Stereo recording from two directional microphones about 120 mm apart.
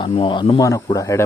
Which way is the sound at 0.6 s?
30° left (ahead or behind).